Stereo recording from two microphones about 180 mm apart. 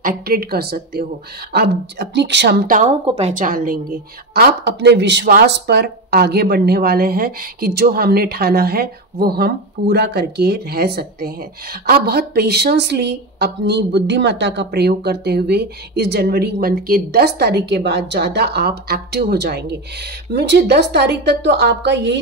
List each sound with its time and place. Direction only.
0.0 s speech: 55° right (ahead or behind)
3.1 s speech: 35° right (ahead or behind); by 22.2 s 75° right (ahead or behind)